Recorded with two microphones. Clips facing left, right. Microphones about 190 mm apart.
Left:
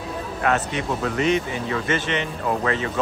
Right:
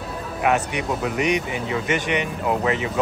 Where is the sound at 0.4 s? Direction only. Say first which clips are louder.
Right 2 dB; 15° right (ahead or behind).